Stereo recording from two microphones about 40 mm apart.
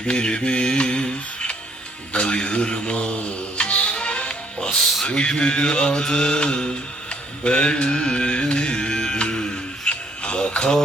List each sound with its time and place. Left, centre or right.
0.0 s music: left
2.1 s speech: left
5.0 s mantra: left